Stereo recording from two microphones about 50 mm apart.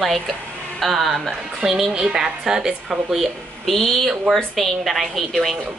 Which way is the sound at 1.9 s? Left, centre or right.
Centre.